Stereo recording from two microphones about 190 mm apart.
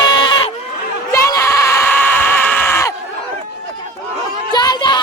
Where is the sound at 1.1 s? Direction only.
15° left (ahead or behind).